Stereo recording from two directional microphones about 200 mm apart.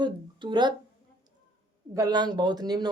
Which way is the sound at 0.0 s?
25° right (ahead or behind).